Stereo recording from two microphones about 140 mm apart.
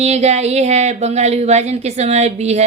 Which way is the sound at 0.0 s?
50° right (ahead or behind).